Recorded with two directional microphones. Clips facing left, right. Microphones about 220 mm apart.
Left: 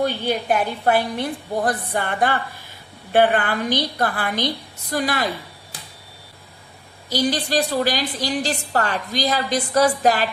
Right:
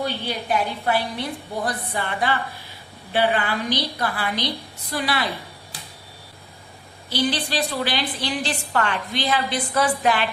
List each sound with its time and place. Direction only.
0.0 s a woman's voice: 50° left (ahead or behind)
7.1 s a woman's voice: 45° left (ahead or behind)